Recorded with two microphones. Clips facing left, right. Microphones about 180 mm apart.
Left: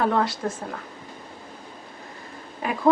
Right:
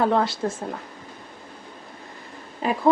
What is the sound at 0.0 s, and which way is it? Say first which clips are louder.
Speech: right 2 dB; 25° right (ahead or behind).